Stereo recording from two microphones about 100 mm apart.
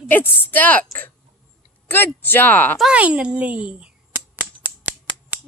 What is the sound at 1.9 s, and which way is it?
Speech, 20° left (ahead or behind).